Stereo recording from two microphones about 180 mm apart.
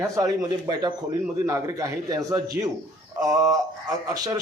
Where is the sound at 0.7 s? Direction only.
20° right (ahead or behind).